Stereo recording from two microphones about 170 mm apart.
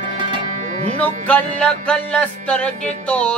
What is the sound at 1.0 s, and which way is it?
Music, 10° left (ahead or behind).